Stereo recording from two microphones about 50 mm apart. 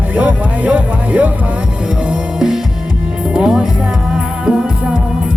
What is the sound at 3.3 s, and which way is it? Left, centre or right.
Music, centre.